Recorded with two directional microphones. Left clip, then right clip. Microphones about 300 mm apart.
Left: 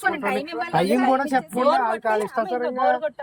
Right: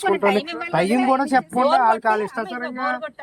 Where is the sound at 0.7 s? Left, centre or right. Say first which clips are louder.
Right 1 dB; centre.